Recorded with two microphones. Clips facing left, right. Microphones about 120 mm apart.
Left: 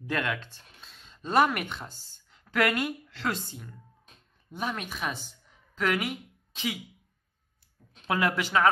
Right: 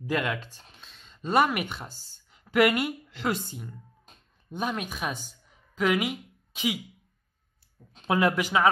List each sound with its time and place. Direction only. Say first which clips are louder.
0.0 s speech: right 2 dB; 10° right (ahead or behind)
0.7 s a sound: even; centre (ahead or behind)
1.2 s speech: even; 5° right (ahead or behind)
8.1 s speech: right 3 dB; 20° right (ahead or behind)